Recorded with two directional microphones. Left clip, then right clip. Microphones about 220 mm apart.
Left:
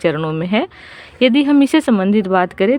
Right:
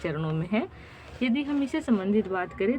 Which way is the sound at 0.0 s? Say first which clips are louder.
Left 14 dB; 40° left (ahead or behind).